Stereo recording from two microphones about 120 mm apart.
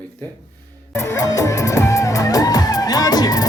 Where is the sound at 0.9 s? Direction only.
25° left (ahead or behind).